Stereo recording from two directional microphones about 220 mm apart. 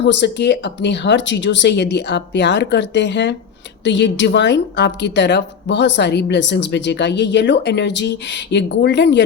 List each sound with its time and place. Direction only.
0.0 s speech: 50° left (ahead or behind)